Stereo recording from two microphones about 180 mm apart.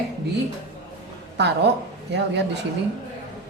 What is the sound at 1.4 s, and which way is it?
Mantra, 70° right (ahead or behind).